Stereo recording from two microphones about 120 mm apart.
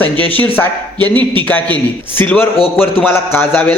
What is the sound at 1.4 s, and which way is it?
A woman's voice, 15° left (ahead or behind).